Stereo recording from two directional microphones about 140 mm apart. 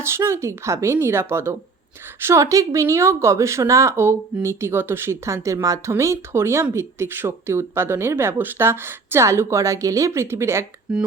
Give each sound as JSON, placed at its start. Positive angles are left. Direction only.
{"t": 0.0, "sound": "speech", "side_deg": -15}
{"t": 10.9, "sound": "speech", "side_deg": -5}